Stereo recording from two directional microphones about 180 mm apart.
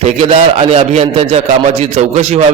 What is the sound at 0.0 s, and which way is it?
A man's voice, 35° right (ahead or behind).